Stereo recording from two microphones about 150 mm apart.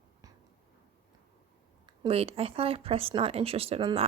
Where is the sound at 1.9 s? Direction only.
40° right (ahead or behind).